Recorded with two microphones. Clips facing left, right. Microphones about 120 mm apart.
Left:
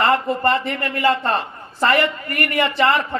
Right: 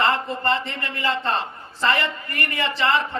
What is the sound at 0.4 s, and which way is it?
Speech, 25° right (ahead or behind).